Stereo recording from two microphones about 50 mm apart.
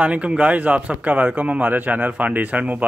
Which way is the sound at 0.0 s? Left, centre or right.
Right.